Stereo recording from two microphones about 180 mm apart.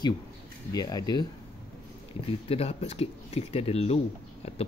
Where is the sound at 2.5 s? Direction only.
35° left (ahead or behind).